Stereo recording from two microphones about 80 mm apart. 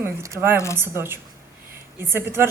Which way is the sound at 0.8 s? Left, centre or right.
Right.